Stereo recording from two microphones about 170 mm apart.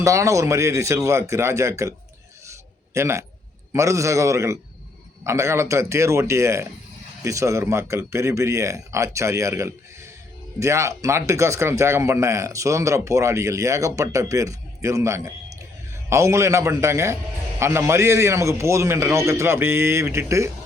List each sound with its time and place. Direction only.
0.0 s a man's voice: 20° right (ahead or behind)
2.5 s a sound: 15° right (ahead or behind)
3.7 s a man's voice: 20° right (ahead or behind)